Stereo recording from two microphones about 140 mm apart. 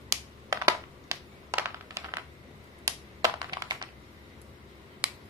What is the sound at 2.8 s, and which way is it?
Computer keyboard, 25° right (ahead or behind).